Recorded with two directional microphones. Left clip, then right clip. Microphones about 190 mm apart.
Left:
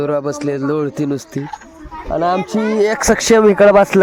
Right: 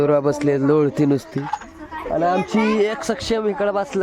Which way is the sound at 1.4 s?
35° right (ahead or behind).